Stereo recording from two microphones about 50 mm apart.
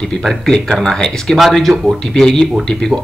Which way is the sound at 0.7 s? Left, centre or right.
Centre.